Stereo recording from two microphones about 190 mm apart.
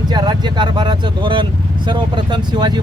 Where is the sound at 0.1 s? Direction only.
20° right (ahead or behind).